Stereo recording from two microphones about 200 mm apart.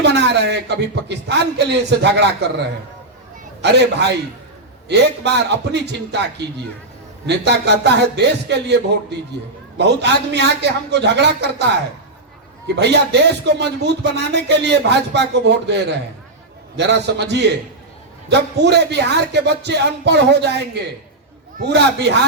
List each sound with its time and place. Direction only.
0.0 s a man's voice: 60° right (ahead or behind)
3.6 s a man's voice: 60° right (ahead or behind)
12.6 s a man's voice: 55° right (ahead or behind)